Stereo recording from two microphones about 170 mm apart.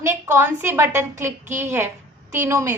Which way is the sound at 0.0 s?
15° right (ahead or behind).